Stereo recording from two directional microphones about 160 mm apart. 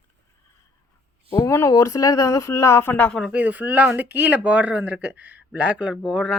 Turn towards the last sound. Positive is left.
turn(degrees=0)  # may be behind; listen again after turning